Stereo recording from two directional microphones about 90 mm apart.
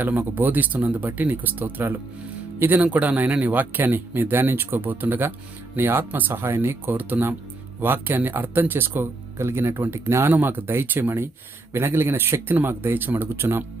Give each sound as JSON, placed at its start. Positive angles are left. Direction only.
{"t": 0.0, "sound": "speech", "side_deg": -20}